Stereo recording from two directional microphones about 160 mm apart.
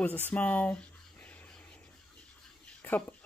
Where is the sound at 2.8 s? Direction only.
10° left (ahead or behind).